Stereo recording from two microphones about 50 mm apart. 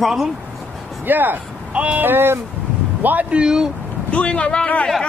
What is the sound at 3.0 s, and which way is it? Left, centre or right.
Speech, right.